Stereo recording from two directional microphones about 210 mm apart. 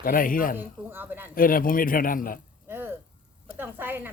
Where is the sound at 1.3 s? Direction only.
40° left (ahead or behind).